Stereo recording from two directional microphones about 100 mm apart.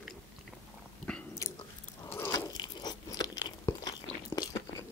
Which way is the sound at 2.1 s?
20° left (ahead or behind).